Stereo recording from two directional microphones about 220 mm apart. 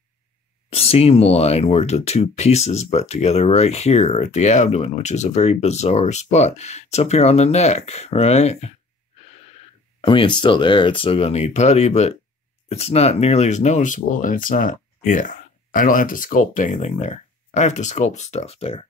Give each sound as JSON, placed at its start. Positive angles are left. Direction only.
{"t": 0.7, "sound": "speech", "side_deg": 25}
{"t": 10.0, "sound": "speech", "side_deg": 20}